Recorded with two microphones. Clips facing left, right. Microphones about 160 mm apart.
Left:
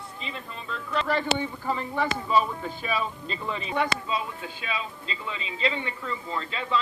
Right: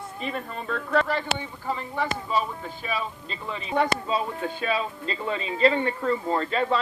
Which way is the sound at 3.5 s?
45° right (ahead or behind).